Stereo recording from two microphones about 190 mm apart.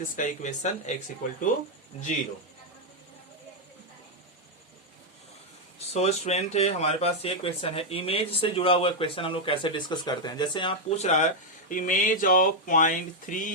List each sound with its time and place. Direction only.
0.2 s speech: 40° left (ahead or behind)
5.9 s speech: 35° left (ahead or behind)